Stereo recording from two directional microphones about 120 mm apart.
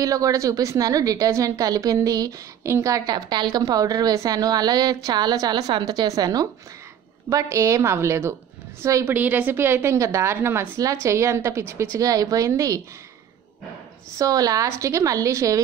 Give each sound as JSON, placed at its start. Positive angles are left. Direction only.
{"t": 0.0, "sound": "a woman's voice", "side_deg": -30}
{"t": 14.1, "sound": "a woman's voice", "side_deg": -30}